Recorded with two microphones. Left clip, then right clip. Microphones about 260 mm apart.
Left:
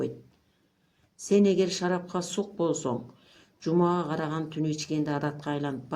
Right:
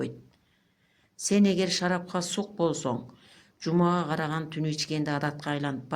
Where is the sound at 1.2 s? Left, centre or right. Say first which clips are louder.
Left 3 dB; right.